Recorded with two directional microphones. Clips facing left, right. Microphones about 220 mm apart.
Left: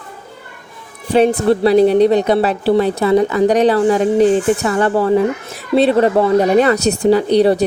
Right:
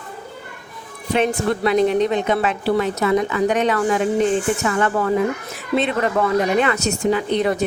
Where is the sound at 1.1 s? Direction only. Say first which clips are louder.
Left 7 dB; 35° left (ahead or behind).